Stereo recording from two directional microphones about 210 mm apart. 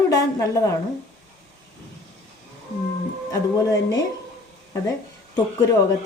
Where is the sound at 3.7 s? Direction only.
15° left (ahead or behind).